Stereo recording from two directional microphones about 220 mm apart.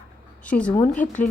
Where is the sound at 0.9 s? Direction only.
35° left (ahead or behind).